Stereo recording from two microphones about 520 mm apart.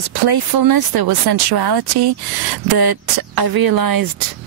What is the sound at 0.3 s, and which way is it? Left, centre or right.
Speech, right.